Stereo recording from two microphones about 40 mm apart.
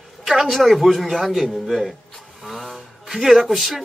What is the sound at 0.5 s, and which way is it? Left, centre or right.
Speech, centre.